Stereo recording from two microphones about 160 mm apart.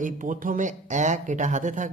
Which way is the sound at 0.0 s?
55° right (ahead or behind).